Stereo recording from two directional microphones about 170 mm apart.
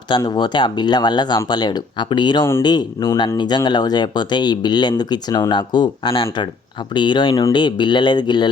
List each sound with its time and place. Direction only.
0.1 s speech: 25° left (ahead or behind)